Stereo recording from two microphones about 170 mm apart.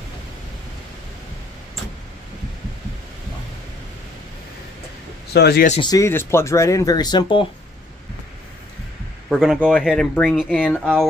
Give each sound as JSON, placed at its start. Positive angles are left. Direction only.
{"t": 5.3, "sound": "a man's voice", "side_deg": 75}
{"t": 5.8, "sound": "speech", "side_deg": 20}
{"t": 9.3, "sound": "speech", "side_deg": 0}